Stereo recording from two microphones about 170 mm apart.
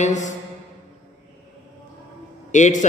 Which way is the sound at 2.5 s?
45° left (ahead or behind).